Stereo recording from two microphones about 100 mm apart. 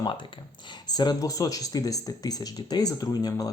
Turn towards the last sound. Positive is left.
turn(degrees=40)  # may be behind; listen again after turning